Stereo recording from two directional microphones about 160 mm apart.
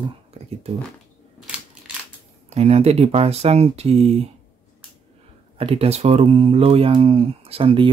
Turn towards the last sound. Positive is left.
turn(degrees=-35)  # may be behind; listen again after turning